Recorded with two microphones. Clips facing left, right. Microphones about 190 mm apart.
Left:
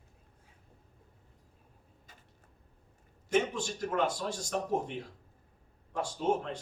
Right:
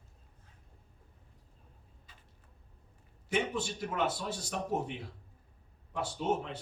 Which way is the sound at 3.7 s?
5° right (ahead or behind).